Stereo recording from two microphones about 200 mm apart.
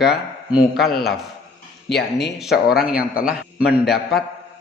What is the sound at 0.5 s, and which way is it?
A man's voice, 5° right (ahead or behind).